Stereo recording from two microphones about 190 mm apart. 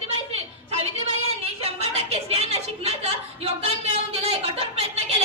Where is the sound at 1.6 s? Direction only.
30° right (ahead or behind).